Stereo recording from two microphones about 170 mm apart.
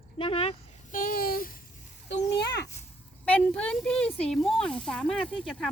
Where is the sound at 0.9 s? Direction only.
55° left (ahead or behind).